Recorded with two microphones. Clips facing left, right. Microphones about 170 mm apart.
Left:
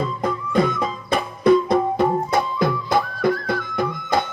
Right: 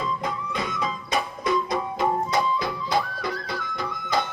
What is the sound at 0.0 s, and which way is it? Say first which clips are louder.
Music: left 5 dB; 50° left (ahead or behind).